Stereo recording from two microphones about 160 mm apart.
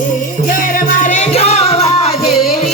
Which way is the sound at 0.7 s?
50° left (ahead or behind).